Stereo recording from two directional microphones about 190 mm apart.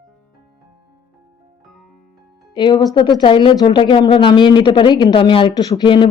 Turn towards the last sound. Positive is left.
turn(degrees=25)  # may be behind; listen again after turning